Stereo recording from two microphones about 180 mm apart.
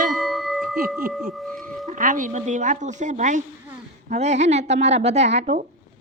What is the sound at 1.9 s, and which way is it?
A woman's voice, 45° right (ahead or behind).